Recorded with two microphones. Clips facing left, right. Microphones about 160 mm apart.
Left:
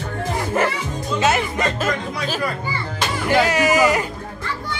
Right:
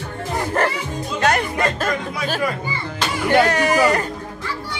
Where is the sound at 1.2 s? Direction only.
5° left (ahead or behind).